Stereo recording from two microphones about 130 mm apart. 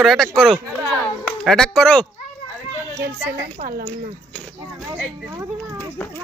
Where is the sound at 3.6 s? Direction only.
70° right (ahead or behind).